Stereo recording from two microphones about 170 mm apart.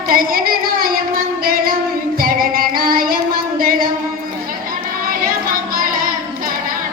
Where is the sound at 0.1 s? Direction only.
55° right (ahead or behind).